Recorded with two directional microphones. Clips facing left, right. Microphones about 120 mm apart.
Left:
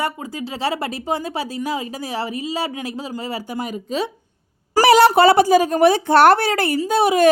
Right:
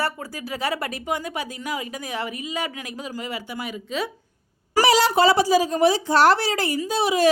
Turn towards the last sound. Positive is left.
turn(degrees=55)  # may be behind; listen again after turning